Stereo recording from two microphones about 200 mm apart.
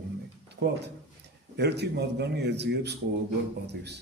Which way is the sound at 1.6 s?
55° right (ahead or behind).